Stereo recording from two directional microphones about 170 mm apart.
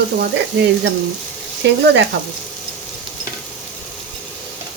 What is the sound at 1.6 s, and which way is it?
Speech, 90° right.